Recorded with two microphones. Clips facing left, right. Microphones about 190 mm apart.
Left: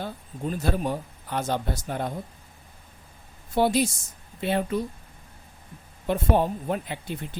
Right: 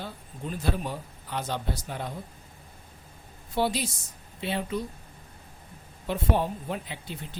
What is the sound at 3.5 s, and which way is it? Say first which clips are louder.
Speech: left 5 dB; 50° left (ahead or behind).